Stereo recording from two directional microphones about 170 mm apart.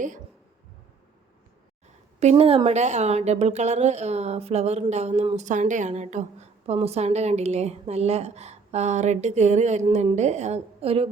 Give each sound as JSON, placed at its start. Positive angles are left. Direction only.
{"t": 2.3, "sound": "a woman's voice", "side_deg": -30}